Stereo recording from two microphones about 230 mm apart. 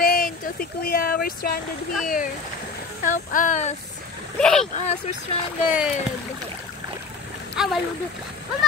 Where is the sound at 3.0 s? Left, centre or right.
Left.